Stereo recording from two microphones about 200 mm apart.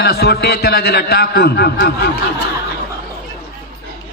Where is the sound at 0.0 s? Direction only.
55° left (ahead or behind).